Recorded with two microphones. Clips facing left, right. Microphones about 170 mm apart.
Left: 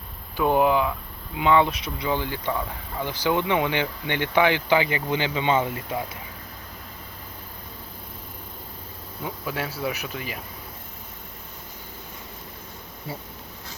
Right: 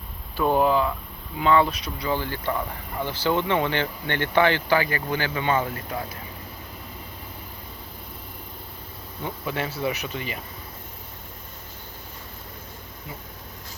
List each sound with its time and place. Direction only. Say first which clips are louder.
0.3 s speech: even; 10° left (ahead or behind)
2.5 s speech: right 2 dB; centre (ahead or behind)
3.0 s speech: even; 15° left (ahead or behind)
9.2 s speech: right 1 dB; 5° left (ahead or behind)